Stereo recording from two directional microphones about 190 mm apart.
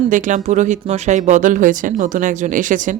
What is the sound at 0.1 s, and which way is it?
Speech, 40° right (ahead or behind).